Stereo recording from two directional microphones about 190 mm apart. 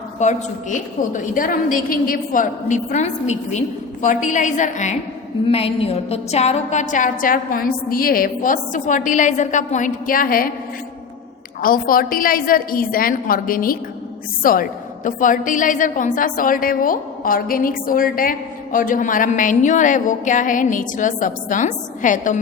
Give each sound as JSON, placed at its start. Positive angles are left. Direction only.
{"t": 0.2, "sound": "a woman's voice", "side_deg": 40}
{"t": 11.6, "sound": "a woman's voice", "side_deg": 45}